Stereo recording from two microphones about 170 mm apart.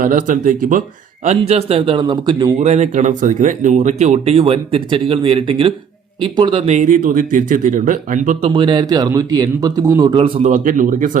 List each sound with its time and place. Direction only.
0.0 s speech: 50° right (ahead or behind); by 2.5 s 25° right (ahead or behind)
2.6 s speech: 40° right (ahead or behind)
8.4 s a man's voice: 30° right (ahead or behind)
10.5 s speech: 50° right (ahead or behind)